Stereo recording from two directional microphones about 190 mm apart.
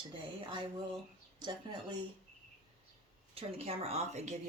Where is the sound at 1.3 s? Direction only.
25° right (ahead or behind).